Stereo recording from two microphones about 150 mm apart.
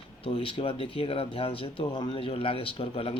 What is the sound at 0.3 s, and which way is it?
Speech, 40° left (ahead or behind).